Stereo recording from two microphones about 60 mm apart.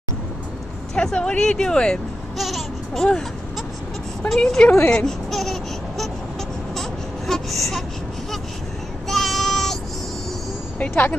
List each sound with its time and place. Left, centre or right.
0.9 s speech: centre
2.3 s babbling: centre
4.3 s speech: centre
4.8 s baby cry: centre
9.0 s child singing: centre
10.8 s a woman's voice: left